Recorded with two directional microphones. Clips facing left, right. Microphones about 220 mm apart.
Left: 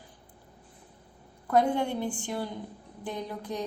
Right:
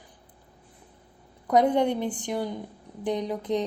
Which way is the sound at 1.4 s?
20° right (ahead or behind).